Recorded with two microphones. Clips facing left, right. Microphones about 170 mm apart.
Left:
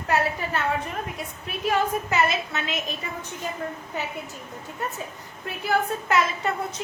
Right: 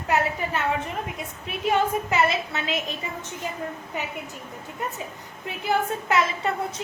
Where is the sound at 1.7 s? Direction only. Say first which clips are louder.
Right 1 dB; 25° right (ahead or behind).